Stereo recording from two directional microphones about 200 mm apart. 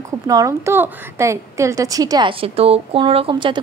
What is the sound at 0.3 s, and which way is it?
A woman's voice, 15° right (ahead or behind).